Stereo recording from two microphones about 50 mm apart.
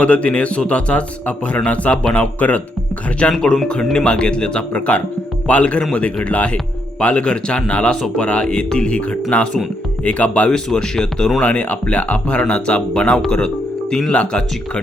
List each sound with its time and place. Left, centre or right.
0.0 s speech: left
3.3 s speech: centre; by 10.5 s left
10.5 s speech: centre